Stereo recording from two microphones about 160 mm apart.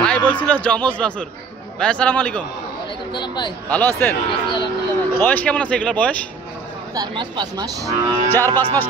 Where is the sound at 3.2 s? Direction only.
30° left (ahead or behind).